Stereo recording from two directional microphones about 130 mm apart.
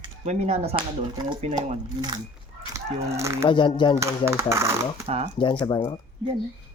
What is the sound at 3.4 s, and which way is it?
Speech, 40° left (ahead or behind).